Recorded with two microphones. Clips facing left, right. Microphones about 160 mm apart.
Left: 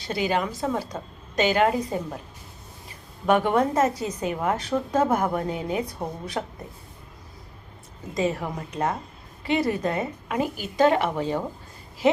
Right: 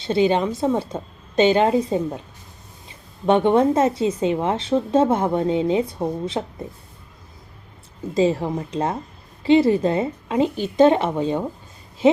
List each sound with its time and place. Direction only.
0.0 s a woman's voice: 25° right (ahead or behind)
3.2 s a woman's voice: 25° right (ahead or behind)
8.1 s a woman's voice: 30° right (ahead or behind)